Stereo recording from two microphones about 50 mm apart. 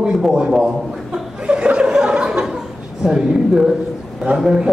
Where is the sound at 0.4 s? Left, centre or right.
Centre.